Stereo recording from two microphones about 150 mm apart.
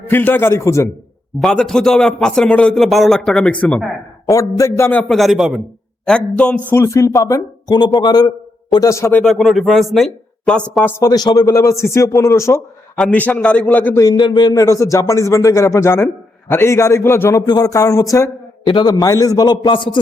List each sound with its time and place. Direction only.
0.1 s a man's voice: 15° left (ahead or behind)
1.4 s speech: 5° left (ahead or behind)
4.3 s a man's voice: 20° left (ahead or behind)
4.9 s a man's voice: 5° left (ahead or behind)
6.7 s a man's voice: 20° left (ahead or behind)
9.2 s speech: centre (ahead or behind)
11.0 s a man's voice: 25° left (ahead or behind)
13.0 s a man's voice: 10° left (ahead or behind); by 20.0 s 30° left (ahead or behind)